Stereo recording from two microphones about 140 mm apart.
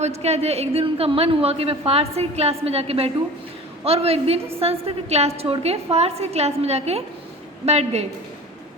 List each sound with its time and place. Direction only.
0.0 s a woman's voice: 50° right (ahead or behind)